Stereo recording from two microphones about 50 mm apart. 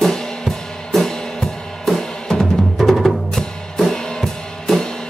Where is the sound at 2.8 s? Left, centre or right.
Centre.